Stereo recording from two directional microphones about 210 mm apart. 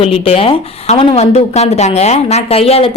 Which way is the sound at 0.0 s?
25° left (ahead or behind).